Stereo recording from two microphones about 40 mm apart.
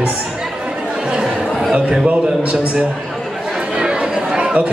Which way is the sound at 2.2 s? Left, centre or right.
Right.